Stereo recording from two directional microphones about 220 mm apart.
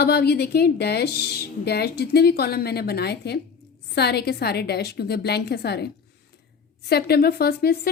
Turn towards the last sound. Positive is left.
turn(degrees=45)  # may be behind; listen again after turning